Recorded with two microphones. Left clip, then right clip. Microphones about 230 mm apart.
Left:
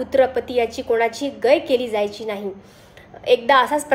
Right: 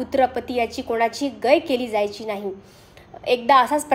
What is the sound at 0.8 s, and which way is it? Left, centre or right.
A woman's voice, right.